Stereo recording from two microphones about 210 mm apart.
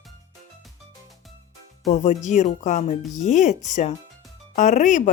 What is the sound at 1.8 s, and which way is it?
Speech, 35° left (ahead or behind).